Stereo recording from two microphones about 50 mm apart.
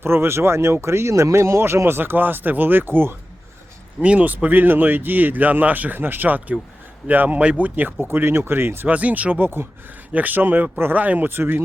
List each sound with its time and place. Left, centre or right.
0.0 s speech: right
4.0 s speech: right
8.0 s speech: right
8.9 s speech: right
10.1 s speech: right
11.3 s speech: right